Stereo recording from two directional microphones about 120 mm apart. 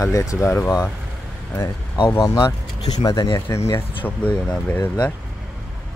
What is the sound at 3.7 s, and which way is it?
Speech, 20° left (ahead or behind).